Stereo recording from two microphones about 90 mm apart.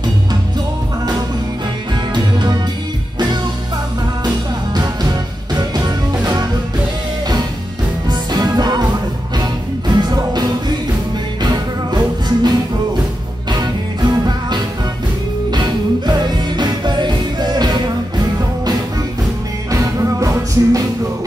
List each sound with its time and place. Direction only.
2.1 s music: 55° right (ahead or behind)
4.7 s music: 50° right (ahead or behind)
8.1 s music: 50° right (ahead or behind)
11.4 s music: 50° right (ahead or behind)
19.7 s music: 40° right (ahead or behind)